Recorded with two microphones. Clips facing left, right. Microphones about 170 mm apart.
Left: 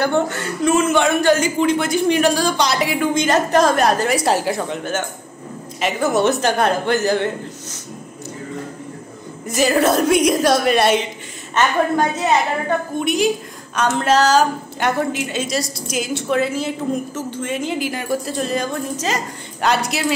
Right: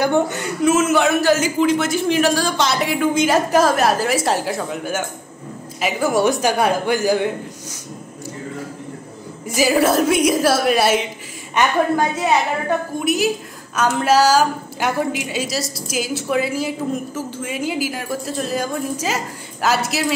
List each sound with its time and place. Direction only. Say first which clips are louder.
0.0 s speech: right 1 dB; 15° right (ahead or behind)
0.7 s a man's voice: even; 5° right (ahead or behind)
9.6 s a man's voice: even; 5° right (ahead or behind)